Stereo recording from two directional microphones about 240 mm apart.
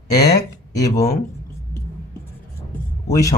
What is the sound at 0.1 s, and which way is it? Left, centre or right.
Speech, centre.